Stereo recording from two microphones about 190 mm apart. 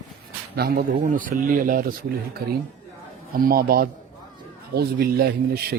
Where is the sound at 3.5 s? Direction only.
50° right (ahead or behind).